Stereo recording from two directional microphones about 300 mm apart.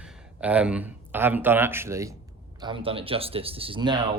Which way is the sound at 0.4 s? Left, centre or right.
Centre.